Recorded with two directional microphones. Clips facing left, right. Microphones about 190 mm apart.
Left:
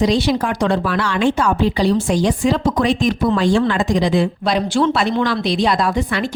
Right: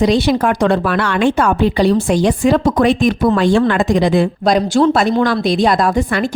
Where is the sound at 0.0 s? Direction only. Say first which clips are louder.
Right 3 dB; 55° right (ahead or behind).